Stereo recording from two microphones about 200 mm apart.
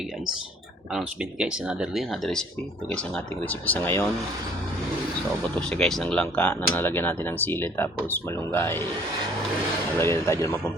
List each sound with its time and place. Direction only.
0.9 s speech: 5° right (ahead or behind)
3.5 s speech: 10° left (ahead or behind)
5.5 s speech: 5° left (ahead or behind)
10.0 s speech: 15° left (ahead or behind)